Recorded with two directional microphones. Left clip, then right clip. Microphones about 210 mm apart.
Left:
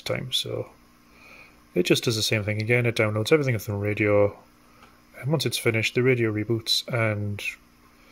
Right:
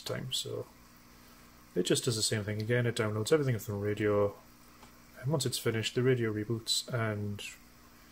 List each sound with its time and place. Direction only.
0.0 s speech: 35° left (ahead or behind)
1.8 s speech: 35° left (ahead or behind)